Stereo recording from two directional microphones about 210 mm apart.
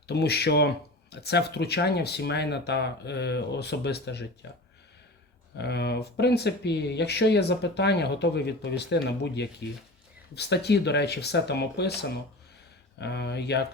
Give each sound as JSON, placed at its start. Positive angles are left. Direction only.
{"t": 0.1, "sound": "speech", "side_deg": 50}
{"t": 5.5, "sound": "speech", "side_deg": 50}
{"t": 13.0, "sound": "speech", "side_deg": 50}